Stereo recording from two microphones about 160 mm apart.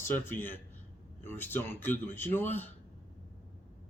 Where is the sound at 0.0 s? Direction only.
15° left (ahead or behind).